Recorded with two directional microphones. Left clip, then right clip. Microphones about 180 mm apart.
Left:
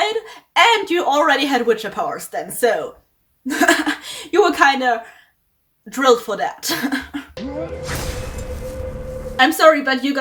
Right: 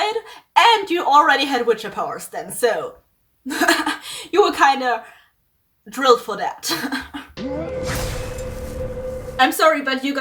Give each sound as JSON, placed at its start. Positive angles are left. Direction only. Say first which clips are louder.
{"t": 0.0, "sound": "a woman's voice", "louder": "left 2 dB", "side_deg": 15}
{"t": 7.3, "sound": "music", "louder": "right 3 dB", "side_deg": 0}
{"t": 9.4, "sound": "speech", "louder": "left 3 dB", "side_deg": 10}